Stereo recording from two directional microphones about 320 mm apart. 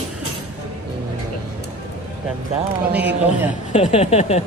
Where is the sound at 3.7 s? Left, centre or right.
Centre.